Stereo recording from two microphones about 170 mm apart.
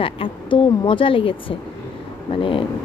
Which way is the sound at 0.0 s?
30° left (ahead or behind).